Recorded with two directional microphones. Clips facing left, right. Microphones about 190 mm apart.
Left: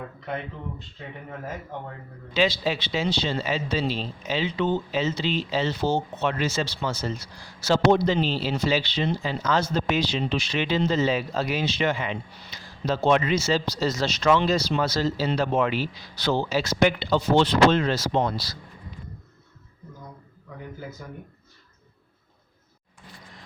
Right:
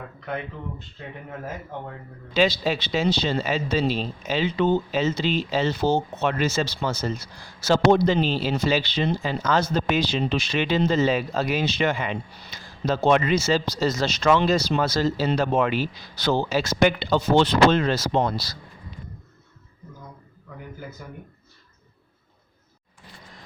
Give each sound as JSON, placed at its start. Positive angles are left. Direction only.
{"t": 2.3, "sound": "speech", "side_deg": -45}
{"t": 21.0, "sound": "speech", "side_deg": -10}